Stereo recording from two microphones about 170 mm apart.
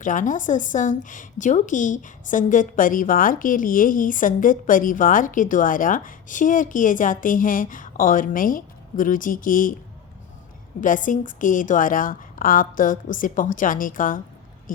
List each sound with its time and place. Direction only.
0.0 s a woman's voice: 50° left (ahead or behind)
10.8 s a woman's voice: 50° left (ahead or behind)